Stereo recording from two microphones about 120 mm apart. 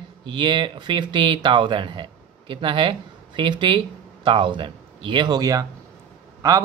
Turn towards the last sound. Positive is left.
turn(degrees=-30)  # may be behind; listen again after turning